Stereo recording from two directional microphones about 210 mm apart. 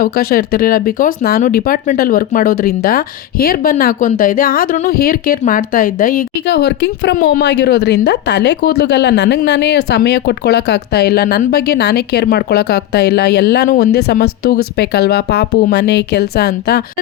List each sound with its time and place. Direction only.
0.0 s speech: 45° left (ahead or behind)